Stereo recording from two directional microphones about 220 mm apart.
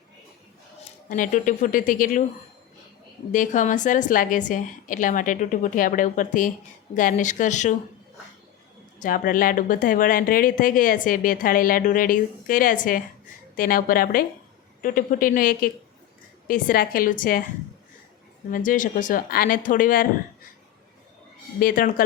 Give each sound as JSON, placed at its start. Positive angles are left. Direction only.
{"t": 1.1, "sound": "speech", "side_deg": 35}
{"t": 3.3, "sound": "speech", "side_deg": 35}
{"t": 9.0, "sound": "speech", "side_deg": 40}
{"t": 18.5, "sound": "speech", "side_deg": 35}
{"t": 21.6, "sound": "speech", "side_deg": 40}